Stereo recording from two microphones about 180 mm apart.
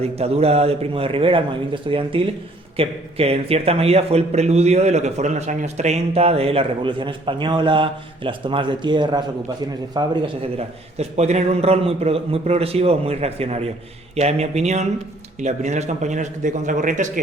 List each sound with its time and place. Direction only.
0.0 s a man's voice: 35° right (ahead or behind)
10.9 s a man's voice: 40° right (ahead or behind)